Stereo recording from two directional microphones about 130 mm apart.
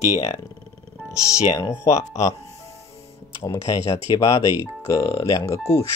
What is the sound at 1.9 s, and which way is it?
Speech, 25° left (ahead or behind).